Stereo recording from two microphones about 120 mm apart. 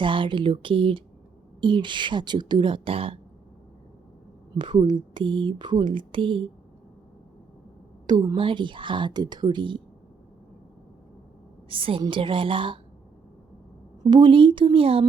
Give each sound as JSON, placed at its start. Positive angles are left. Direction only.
{"t": 0.0, "sound": "speech", "side_deg": -45}
{"t": 4.5, "sound": "speech", "side_deg": -40}
{"t": 8.0, "sound": "a woman's voice", "side_deg": -30}
{"t": 8.4, "sound": "speech", "side_deg": -45}
{"t": 11.7, "sound": "speech", "side_deg": -50}
{"t": 14.0, "sound": "speech", "side_deg": -35}